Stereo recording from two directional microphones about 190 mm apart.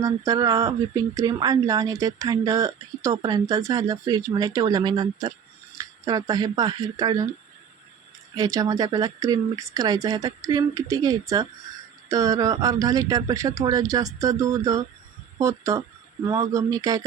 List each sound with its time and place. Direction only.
0.0 s speech: 20° right (ahead or behind)
8.4 s speech: 20° right (ahead or behind)